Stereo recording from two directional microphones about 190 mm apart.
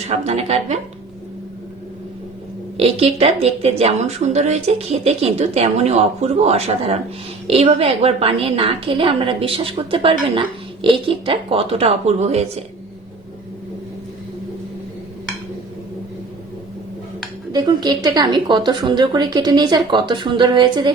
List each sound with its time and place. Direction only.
0.1 s a woman's voice: 35° right (ahead or behind)
2.7 s a woman's voice: 30° right (ahead or behind)
17.5 s speech: 25° right (ahead or behind)